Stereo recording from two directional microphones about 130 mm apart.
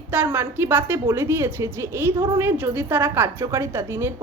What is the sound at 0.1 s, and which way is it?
A woman's voice, 15° right (ahead or behind).